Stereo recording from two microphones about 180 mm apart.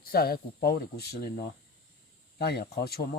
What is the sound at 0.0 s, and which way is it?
Speech, 55° left (ahead or behind).